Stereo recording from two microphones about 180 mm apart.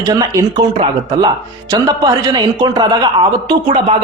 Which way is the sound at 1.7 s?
20° right (ahead or behind).